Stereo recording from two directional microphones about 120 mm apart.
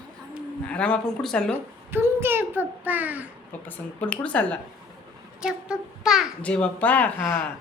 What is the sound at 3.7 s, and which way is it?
Speech, 10° left (ahead or behind).